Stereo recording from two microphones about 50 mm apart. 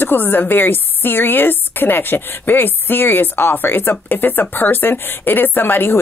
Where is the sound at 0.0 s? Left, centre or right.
Left.